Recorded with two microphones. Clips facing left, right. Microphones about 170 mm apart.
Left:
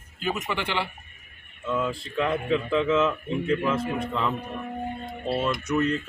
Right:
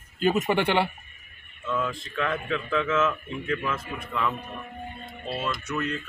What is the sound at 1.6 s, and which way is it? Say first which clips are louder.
Speech: left 2 dB; 15° left (ahead or behind).